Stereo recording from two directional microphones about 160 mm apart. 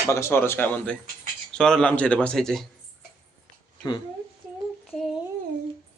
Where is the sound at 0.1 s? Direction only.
15° left (ahead or behind).